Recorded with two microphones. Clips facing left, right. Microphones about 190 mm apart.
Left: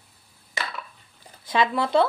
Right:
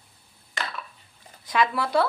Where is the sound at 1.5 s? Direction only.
25° left (ahead or behind).